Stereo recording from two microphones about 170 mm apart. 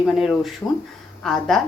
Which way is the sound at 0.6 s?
15° left (ahead or behind).